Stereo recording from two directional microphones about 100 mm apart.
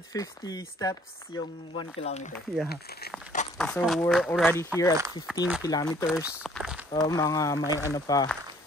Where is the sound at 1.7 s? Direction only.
90° left.